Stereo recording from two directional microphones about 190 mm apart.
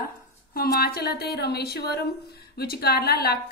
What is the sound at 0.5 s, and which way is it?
A woman's voice, 55° left (ahead or behind).